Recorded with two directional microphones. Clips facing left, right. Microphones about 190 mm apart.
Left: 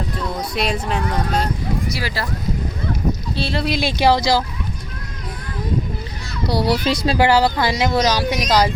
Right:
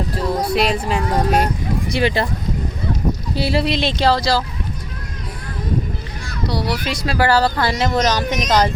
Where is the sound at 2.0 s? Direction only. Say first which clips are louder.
Right 8 dB; 25° right (ahead or behind).